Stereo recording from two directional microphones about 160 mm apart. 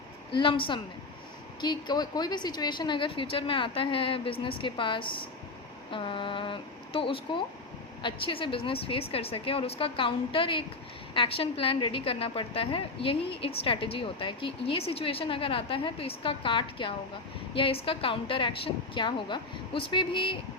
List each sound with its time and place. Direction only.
0.3 s a woman's voice: 35° left (ahead or behind)